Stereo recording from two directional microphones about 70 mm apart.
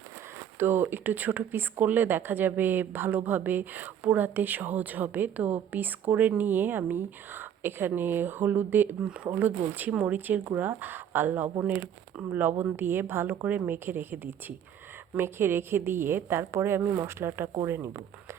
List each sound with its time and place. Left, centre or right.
0.6 s speech: right
9.0 s speech: centre
9.4 s a woman's voice: right